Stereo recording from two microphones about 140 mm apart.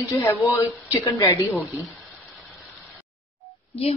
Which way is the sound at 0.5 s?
20° left (ahead or behind).